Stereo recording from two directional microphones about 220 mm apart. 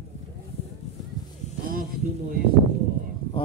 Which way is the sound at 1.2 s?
20° left (ahead or behind).